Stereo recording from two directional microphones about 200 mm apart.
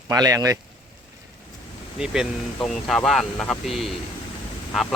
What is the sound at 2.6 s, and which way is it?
Speech, 5° left (ahead or behind).